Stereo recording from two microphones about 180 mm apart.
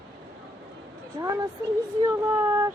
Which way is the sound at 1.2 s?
25° right (ahead or behind).